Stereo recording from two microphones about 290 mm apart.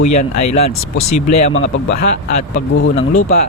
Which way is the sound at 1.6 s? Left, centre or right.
Left.